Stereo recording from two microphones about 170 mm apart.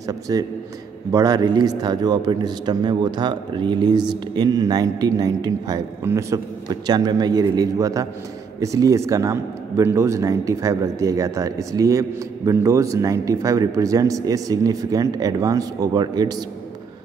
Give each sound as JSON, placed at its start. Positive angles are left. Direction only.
{"t": 0.3, "sound": "a man's voice", "side_deg": -20}